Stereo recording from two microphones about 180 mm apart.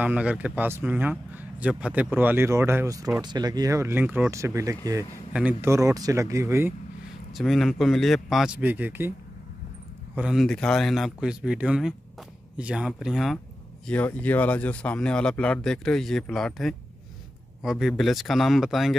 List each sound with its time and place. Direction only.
0.0 s speech: 5° right (ahead or behind)
7.3 s a man's voice: centre (ahead or behind)
10.1 s a man's voice: 5° right (ahead or behind)